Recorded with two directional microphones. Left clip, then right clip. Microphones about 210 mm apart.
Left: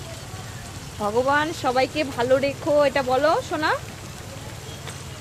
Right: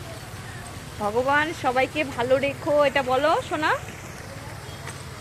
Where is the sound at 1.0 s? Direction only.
10° left (ahead or behind).